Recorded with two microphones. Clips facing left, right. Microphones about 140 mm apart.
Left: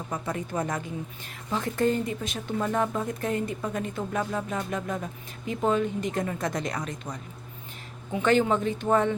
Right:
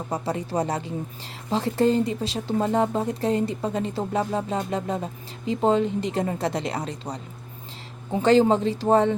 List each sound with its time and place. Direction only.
0.1 s speech: 35° right (ahead or behind)